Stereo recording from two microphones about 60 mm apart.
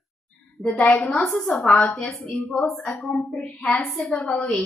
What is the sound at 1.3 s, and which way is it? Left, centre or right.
Speech, left.